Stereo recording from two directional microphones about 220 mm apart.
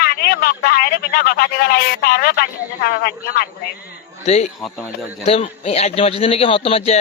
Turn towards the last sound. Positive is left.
turn(degrees=25)  # may be behind; listen again after turning